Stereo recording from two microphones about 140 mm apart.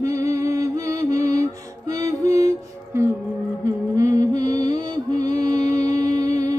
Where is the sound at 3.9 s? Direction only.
25° right (ahead or behind).